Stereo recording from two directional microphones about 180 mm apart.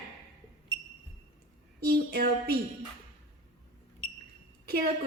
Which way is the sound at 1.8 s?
60° right (ahead or behind).